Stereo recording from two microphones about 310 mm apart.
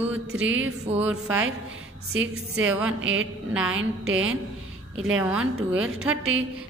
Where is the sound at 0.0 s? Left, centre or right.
Centre.